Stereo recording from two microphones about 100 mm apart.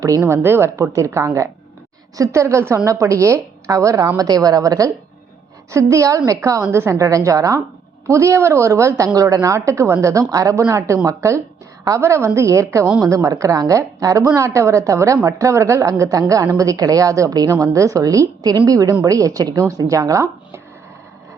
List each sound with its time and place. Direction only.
0.3 s a woman's voice: 25° right (ahead or behind)